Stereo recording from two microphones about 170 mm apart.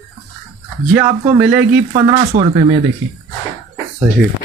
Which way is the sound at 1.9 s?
35° right (ahead or behind).